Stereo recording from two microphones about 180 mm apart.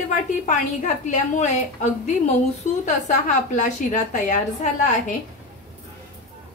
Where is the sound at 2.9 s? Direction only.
40° left (ahead or behind).